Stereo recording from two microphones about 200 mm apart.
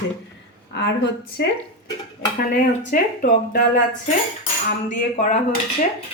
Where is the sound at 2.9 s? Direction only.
45° left (ahead or behind).